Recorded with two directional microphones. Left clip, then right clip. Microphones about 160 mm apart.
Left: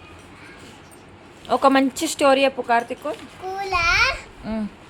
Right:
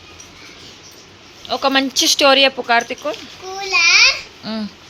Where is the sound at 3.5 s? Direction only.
15° left (ahead or behind).